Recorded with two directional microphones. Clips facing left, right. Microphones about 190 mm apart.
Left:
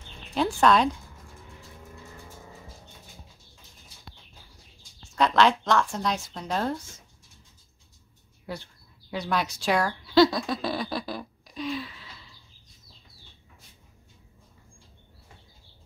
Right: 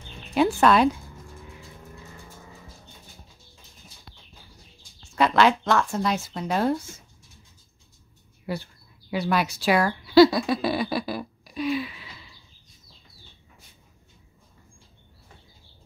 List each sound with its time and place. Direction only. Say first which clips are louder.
0.3 s speech: right 3 dB; 5° right (ahead or behind)
5.1 s speech: right 2 dB; 5° right (ahead or behind)
8.5 s speech: right 5 dB; 5° right (ahead or behind)